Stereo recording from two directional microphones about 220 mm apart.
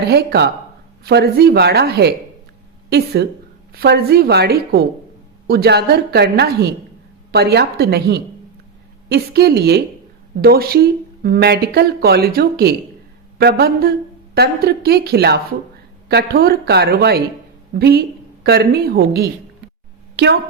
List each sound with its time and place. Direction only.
0.1 s a woman's voice: 45° right (ahead or behind)